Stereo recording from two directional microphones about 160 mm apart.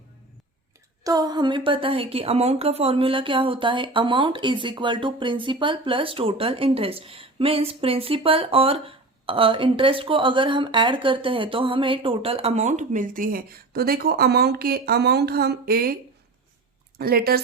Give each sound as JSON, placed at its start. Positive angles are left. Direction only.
{"t": 1.0, "sound": "a woman's voice", "side_deg": -25}
{"t": 17.0, "sound": "speech", "side_deg": -70}